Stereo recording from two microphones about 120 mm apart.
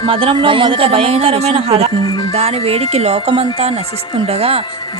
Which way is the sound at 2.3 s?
60° right (ahead or behind).